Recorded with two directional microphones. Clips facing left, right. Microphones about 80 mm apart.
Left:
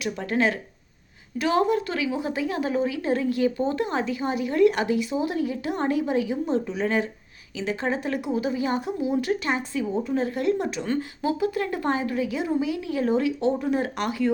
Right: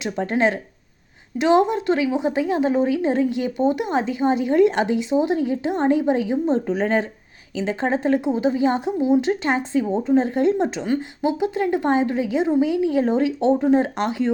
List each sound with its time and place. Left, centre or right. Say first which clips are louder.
0.0 s a woman's voice: right 4 dB; right
6.7 s a woman's voice: right 4 dB; right
10.8 s a woman's voice: right 4 dB; centre